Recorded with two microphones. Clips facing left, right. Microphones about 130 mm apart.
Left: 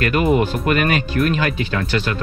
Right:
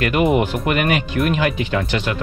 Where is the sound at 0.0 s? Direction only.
15° right (ahead or behind).